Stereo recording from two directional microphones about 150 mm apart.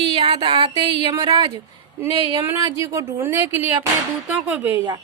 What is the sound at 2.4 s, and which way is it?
Speech, 15° right (ahead or behind).